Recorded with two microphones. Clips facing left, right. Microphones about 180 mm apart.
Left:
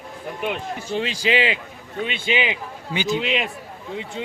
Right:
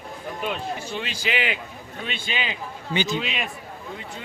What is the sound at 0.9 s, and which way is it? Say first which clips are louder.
Speech: left 10 dB; 30° left (ahead or behind).